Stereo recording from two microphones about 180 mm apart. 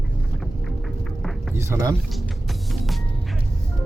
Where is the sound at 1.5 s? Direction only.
15° right (ahead or behind).